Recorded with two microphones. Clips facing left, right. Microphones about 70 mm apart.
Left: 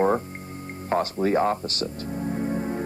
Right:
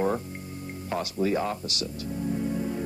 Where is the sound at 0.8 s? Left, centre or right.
Left.